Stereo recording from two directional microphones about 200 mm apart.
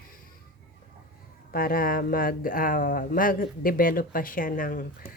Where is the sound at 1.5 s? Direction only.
45° left (ahead or behind).